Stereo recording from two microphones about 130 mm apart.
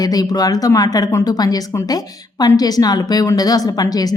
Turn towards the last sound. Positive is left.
turn(degrees=30)  # may be behind; listen again after turning